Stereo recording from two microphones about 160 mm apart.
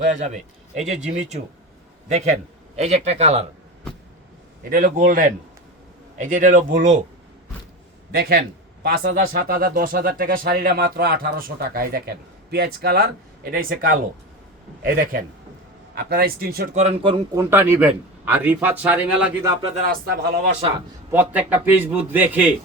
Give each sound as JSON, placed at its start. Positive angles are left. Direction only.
{"t": 0.0, "sound": "speech", "side_deg": -50}
{"t": 2.7, "sound": "speech", "side_deg": -40}
{"t": 4.7, "sound": "a man's voice", "side_deg": -60}
{"t": 8.1, "sound": "a man's voice", "side_deg": -85}
{"t": 16.0, "sound": "speech", "side_deg": -75}
{"t": 16.7, "sound": "a man's voice", "side_deg": -40}
{"t": 17.3, "sound": "a man's voice", "side_deg": -15}
{"t": 19.8, "sound": "speech", "side_deg": -70}
{"t": 20.6, "sound": "a man's voice", "side_deg": -35}
{"t": 21.1, "sound": "a man's voice", "side_deg": -10}